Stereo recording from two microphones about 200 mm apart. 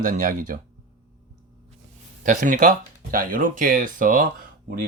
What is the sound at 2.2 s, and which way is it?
Speech, 40° right (ahead or behind).